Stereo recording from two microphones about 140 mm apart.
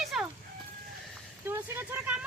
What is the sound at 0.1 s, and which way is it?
Music, centre (ahead or behind).